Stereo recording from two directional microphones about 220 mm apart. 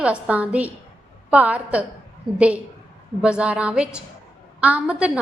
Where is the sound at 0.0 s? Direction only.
5° right (ahead or behind).